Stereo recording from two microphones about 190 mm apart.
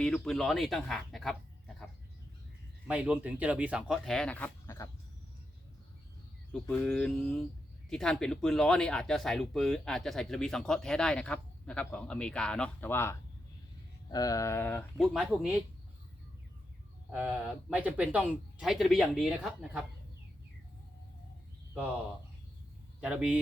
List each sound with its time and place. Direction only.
0.0 s speech: centre (ahead or behind)
2.8 s speech: 5° right (ahead or behind); by 4.9 s 15° left (ahead or behind)
6.5 s speech: 5° left (ahead or behind)
17.1 s speech: 5° right (ahead or behind)
23.0 s speech: 5° right (ahead or behind)